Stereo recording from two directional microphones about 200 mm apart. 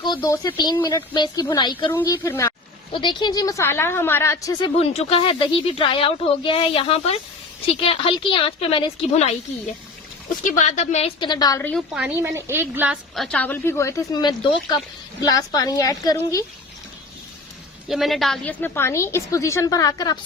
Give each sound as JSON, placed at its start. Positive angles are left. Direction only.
{"t": 0.0, "sound": "a woman's voice", "side_deg": 20}
{"t": 4.8, "sound": "speech", "side_deg": 30}
{"t": 10.4, "sound": "speech", "side_deg": 40}
{"t": 11.7, "sound": "a woman's voice", "side_deg": -5}
{"t": 17.8, "sound": "a woman's voice", "side_deg": 0}